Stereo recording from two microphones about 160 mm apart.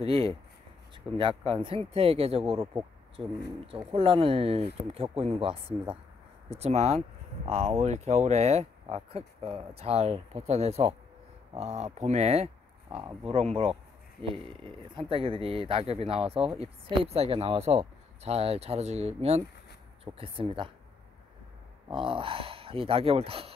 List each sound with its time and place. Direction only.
0.0 s speech: 35° right (ahead or behind)
15.0 s speech: 35° right (ahead or behind)
21.9 s speech: 35° right (ahead or behind)